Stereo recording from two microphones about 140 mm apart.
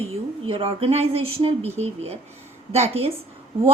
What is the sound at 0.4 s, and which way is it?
A woman's voice, 45° right (ahead or behind).